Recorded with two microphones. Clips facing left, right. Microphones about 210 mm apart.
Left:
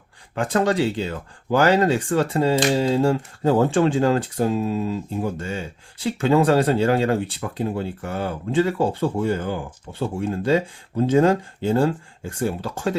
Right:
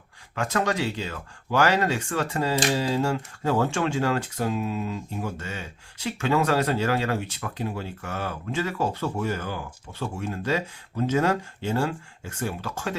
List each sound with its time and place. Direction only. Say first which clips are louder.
0.3 s speech: left 6 dB; 30° left (ahead or behind)